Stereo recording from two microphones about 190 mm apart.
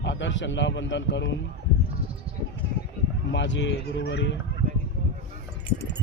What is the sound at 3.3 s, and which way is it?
Speech, 70° left (ahead or behind).